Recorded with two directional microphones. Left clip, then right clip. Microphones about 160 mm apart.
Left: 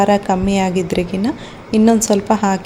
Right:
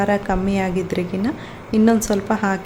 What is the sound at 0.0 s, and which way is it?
A woman's voice, 25° left (ahead or behind).